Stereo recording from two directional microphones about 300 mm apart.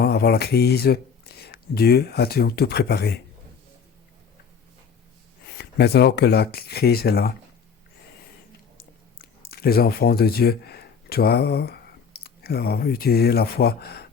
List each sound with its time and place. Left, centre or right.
0.0 s speech: left
5.5 s speech: left
8.8 s speech: left